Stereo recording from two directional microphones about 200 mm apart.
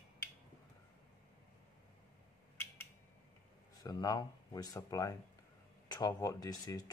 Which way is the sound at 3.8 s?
20° left (ahead or behind).